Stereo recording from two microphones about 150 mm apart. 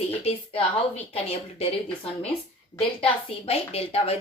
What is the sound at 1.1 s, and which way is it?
Speech, 40° left (ahead or behind).